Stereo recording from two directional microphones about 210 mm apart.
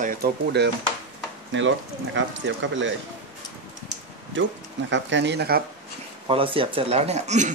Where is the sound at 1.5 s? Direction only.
65° right (ahead or behind).